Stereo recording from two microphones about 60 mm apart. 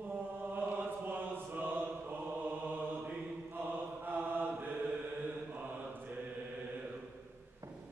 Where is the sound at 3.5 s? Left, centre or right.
Right.